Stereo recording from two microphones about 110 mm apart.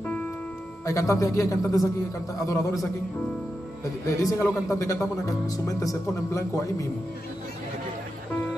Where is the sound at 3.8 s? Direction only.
30° left (ahead or behind).